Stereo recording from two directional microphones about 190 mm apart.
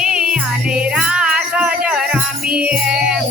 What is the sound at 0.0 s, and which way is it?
Music, 5° right (ahead or behind).